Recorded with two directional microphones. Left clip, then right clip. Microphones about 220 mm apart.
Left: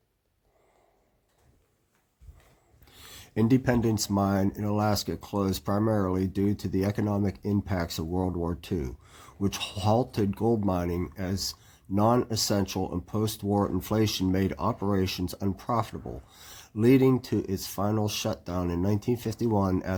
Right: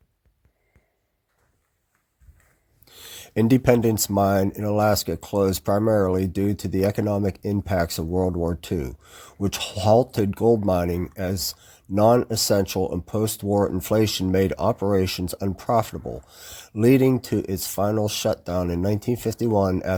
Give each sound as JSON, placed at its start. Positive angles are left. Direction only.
{"t": 2.8, "sound": "speech", "side_deg": -30}